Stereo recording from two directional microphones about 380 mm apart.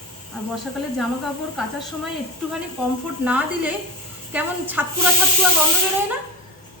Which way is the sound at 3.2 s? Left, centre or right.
Centre.